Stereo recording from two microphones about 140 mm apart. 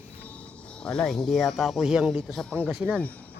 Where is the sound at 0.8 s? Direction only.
5° left (ahead or behind).